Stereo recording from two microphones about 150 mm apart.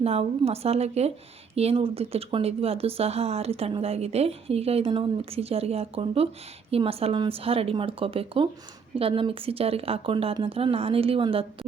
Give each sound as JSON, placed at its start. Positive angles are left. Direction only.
{"t": 0.0, "sound": "a woman's voice", "side_deg": -40}